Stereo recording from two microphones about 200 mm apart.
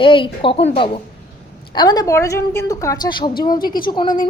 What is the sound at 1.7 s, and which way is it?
A woman's voice, 20° left (ahead or behind).